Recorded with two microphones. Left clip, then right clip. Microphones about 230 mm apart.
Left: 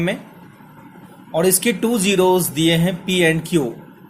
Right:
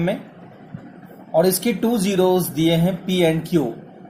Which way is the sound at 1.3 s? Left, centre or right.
Left.